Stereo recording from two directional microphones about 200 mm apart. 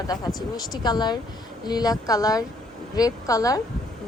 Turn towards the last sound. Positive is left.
turn(degrees=15)  # may be behind; listen again after turning